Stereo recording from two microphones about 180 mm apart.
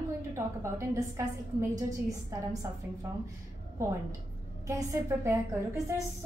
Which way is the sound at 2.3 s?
20° right (ahead or behind).